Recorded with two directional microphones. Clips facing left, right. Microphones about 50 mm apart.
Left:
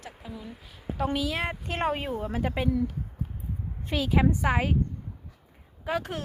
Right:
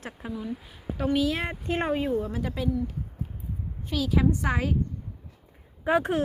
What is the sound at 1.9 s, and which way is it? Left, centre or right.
Speech, centre.